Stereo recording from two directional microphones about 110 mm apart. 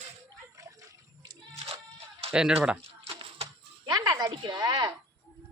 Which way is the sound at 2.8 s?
60° right (ahead or behind).